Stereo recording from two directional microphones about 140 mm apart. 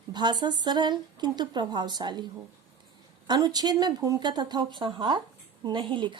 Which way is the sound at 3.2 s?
30° right (ahead or behind).